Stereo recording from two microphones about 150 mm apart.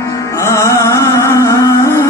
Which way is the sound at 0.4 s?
20° left (ahead or behind).